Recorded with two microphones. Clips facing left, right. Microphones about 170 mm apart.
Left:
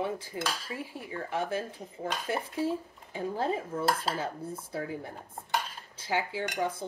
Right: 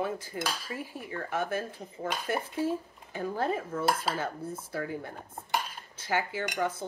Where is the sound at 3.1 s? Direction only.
20° left (ahead or behind).